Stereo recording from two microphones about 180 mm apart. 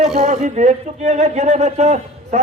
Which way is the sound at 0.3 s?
45° right (ahead or behind).